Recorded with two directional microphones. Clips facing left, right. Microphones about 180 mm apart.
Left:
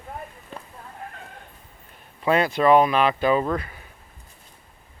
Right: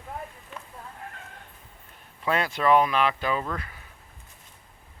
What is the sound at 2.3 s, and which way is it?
Speech, 20° left (ahead or behind).